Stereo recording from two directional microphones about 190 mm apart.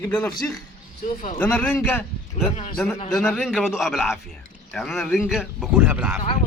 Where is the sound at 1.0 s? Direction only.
45° left (ahead or behind).